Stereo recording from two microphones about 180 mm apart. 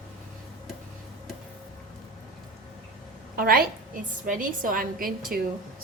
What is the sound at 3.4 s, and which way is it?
A woman's voice, 55° right (ahead or behind).